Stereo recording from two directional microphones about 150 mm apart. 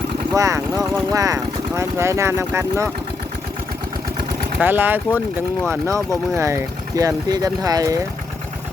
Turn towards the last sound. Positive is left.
turn(degrees=-25)  # may be behind; listen again after turning